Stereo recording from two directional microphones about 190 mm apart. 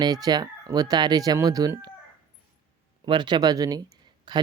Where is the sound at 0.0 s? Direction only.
20° right (ahead or behind).